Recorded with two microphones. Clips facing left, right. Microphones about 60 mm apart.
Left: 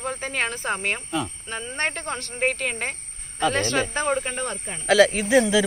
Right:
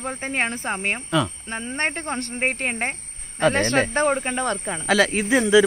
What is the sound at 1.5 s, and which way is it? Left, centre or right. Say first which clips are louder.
Speech: right 2 dB; right.